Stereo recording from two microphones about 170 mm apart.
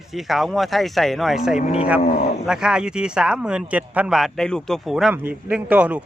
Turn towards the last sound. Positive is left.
turn(degrees=-10)  # may be behind; listen again after turning